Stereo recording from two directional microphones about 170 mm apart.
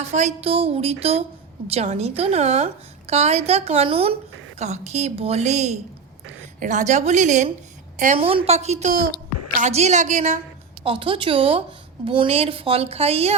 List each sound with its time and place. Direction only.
0.0 s a woman's voice: 40° right (ahead or behind)
10.8 s a woman's voice: 30° right (ahead or behind)